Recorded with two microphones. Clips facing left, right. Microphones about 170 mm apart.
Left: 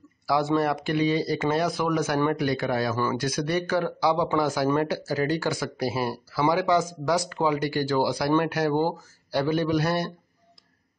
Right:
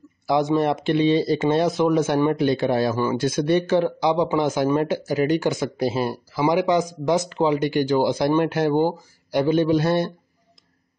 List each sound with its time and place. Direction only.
0.3 s speech: 20° right (ahead or behind)